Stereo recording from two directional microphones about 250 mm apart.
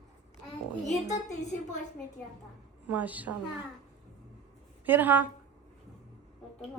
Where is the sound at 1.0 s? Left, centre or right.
Left.